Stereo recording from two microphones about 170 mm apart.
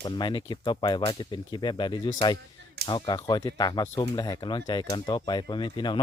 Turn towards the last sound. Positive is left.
turn(degrees=25)  # may be behind; listen again after turning